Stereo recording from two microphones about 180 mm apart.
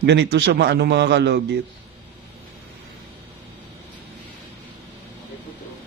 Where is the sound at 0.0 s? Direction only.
70° right (ahead or behind).